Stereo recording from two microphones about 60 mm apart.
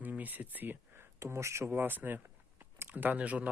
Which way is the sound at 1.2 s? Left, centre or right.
Right.